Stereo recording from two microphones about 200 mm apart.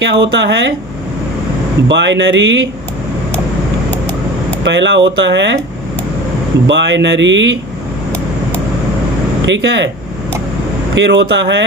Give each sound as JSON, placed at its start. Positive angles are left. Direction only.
{"t": 0.0, "sound": "speech", "side_deg": -65}
{"t": 1.9, "sound": "speech", "side_deg": -65}
{"t": 4.6, "sound": "speech", "side_deg": -65}
{"t": 6.7, "sound": "speech", "side_deg": -65}
{"t": 9.5, "sound": "speech", "side_deg": -65}
{"t": 10.9, "sound": "speech", "side_deg": -60}